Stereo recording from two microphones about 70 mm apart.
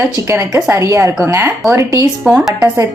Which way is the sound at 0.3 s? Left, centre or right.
Right.